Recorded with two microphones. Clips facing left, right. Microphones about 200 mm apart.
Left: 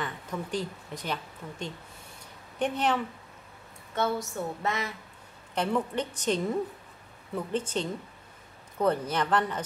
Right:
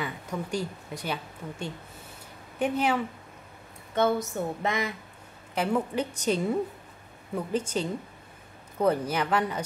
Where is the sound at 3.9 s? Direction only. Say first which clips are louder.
Right 4 dB; 20° right (ahead or behind).